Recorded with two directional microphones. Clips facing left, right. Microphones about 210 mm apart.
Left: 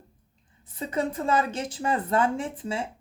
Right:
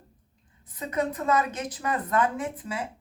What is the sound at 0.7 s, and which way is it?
Speech, 30° left (ahead or behind).